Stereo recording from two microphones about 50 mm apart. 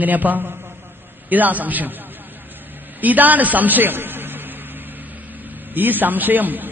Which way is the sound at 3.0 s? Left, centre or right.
Right.